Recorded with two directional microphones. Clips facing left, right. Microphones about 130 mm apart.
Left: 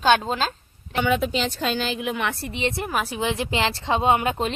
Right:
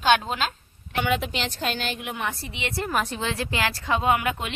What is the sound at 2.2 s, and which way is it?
Speech, 90° left.